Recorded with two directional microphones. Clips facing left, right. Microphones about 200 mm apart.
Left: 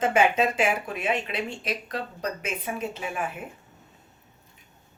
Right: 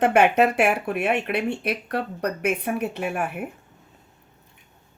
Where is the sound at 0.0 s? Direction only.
65° right (ahead or behind).